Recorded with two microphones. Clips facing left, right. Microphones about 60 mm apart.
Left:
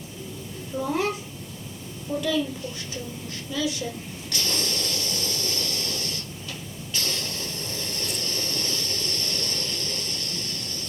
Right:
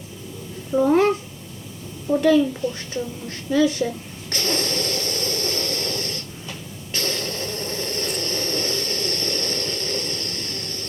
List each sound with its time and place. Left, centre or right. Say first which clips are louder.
0.8 s a child's voice: right 9 dB; right
4.3 s snort: right 5 dB; right
6.9 s a sound: right 5 dB; right